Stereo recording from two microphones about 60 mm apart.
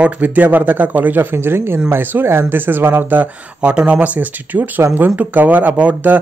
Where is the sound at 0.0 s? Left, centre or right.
Right.